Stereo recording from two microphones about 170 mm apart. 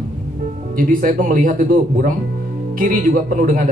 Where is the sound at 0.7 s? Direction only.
55° right (ahead or behind).